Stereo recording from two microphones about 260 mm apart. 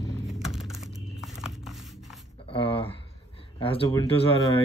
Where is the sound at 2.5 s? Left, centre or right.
Left.